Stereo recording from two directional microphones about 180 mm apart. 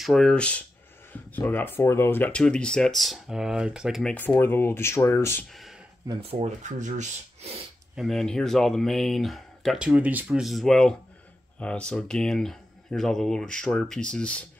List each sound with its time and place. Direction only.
0.0 s speech: 5° left (ahead or behind)
5.5 s a sound: centre (ahead or behind)
6.2 s speech: 40° right (ahead or behind)
7.9 s speech: centre (ahead or behind)